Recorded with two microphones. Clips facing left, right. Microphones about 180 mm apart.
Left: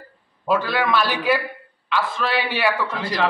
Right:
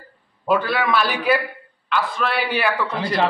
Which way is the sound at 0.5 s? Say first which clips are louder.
Right 1 dB; centre (ahead or behind).